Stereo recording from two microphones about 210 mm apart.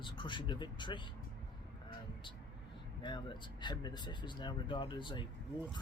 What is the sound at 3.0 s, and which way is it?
Speech, 20° left (ahead or behind).